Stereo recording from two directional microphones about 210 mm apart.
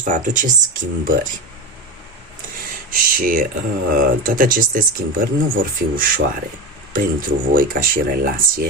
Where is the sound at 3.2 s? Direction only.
40° right (ahead or behind).